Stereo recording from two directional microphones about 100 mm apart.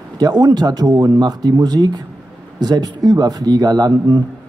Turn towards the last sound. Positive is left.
turn(degrees=-40)  # may be behind; listen again after turning